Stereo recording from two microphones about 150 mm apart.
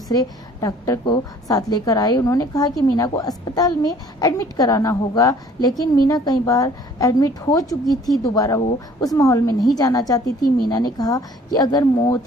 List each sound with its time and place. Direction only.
0.1 s a woman's voice: 25° left (ahead or behind)